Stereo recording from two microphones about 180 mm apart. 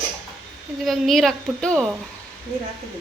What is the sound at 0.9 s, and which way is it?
A woman's voice, centre (ahead or behind).